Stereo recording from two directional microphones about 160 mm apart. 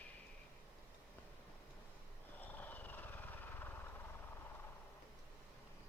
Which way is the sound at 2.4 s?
10° left (ahead or behind).